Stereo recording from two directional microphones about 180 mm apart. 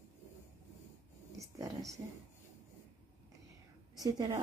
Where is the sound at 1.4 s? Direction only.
20° right (ahead or behind).